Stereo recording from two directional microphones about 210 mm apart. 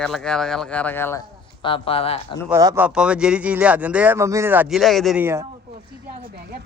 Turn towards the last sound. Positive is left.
turn(degrees=-10)  # may be behind; listen again after turning